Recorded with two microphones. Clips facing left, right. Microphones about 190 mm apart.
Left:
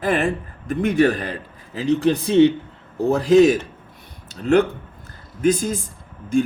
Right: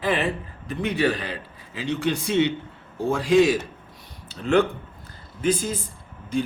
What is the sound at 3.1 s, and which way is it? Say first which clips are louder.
A man's voice: left 5 dB; 45° left (ahead or behind).